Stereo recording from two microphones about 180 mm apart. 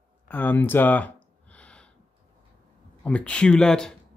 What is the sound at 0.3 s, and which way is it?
Speech, 10° left (ahead or behind).